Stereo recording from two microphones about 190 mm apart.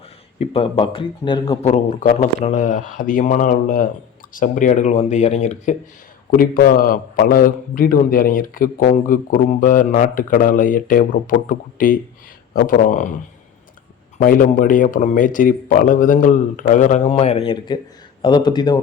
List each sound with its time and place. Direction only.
0.3 s speech: 30° left (ahead or behind)
1.6 s a man's voice: 40° left (ahead or behind)
6.3 s a man's voice: 45° left (ahead or behind)
14.2 s a man's voice: 45° left (ahead or behind); by 18.8 s 20° left (ahead or behind)